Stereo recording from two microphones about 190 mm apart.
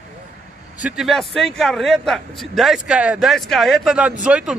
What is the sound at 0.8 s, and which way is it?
A man's voice, centre (ahead or behind).